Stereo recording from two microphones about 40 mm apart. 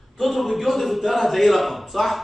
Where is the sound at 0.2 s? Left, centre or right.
Centre.